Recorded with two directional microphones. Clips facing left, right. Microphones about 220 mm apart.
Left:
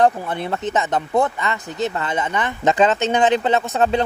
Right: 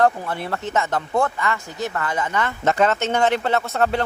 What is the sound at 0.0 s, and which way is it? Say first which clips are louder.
Speech: left 2 dB; 20° left (ahead or behind).